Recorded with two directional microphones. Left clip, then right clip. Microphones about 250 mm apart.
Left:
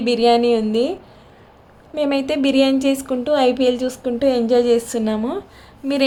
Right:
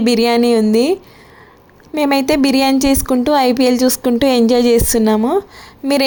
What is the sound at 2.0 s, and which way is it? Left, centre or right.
A woman's voice, right.